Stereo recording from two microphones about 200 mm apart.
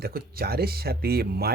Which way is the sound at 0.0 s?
50° right (ahead or behind).